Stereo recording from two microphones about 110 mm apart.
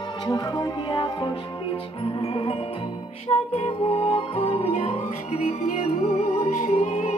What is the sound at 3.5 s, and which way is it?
Music, 70° left (ahead or behind).